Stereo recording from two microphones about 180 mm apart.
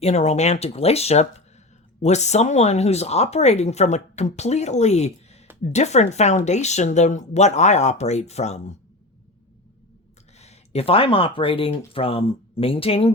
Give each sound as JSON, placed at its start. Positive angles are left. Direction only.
{"t": 0.0, "sound": "speech", "side_deg": 40}
{"t": 10.3, "sound": "speech", "side_deg": 35}